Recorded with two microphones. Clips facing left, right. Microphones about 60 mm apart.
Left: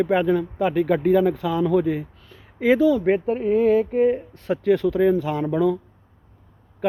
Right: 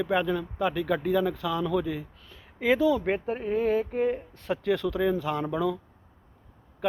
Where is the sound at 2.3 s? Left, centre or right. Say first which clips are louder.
Left 6 dB; centre.